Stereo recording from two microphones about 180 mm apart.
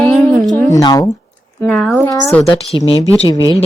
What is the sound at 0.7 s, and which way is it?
Speech, 20° left (ahead or behind).